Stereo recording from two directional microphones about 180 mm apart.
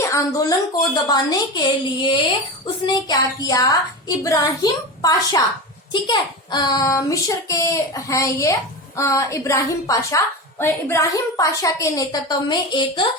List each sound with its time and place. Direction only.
0.0 s a child's voice: 20° left (ahead or behind)